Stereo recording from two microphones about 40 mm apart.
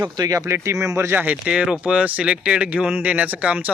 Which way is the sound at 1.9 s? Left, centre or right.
Right.